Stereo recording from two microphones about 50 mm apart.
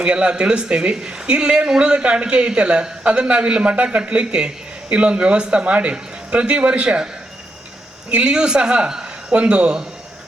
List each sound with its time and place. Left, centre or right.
0.0 s speech: right
8.1 s a man's voice: centre